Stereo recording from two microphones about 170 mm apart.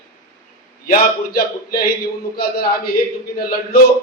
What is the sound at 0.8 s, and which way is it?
Speech, 65° left (ahead or behind).